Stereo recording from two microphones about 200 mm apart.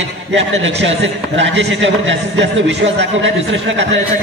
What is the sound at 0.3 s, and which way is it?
A man's voice, 65° right (ahead or behind).